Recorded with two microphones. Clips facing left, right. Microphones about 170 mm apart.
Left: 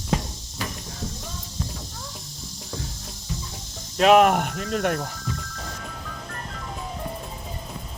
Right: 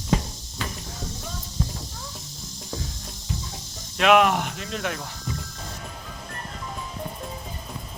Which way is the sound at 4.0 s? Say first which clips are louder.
Left 2 dB; 35° left (ahead or behind).